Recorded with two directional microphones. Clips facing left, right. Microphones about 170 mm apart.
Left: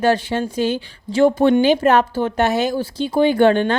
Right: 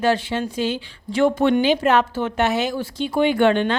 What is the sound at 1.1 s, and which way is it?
A woman's voice, 35° left (ahead or behind).